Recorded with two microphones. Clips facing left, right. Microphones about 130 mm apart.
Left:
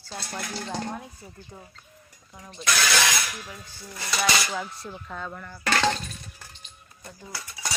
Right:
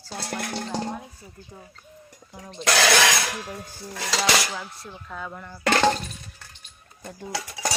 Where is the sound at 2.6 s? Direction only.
75° right (ahead or behind).